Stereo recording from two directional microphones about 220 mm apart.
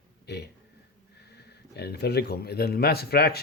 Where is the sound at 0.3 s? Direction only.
50° left (ahead or behind).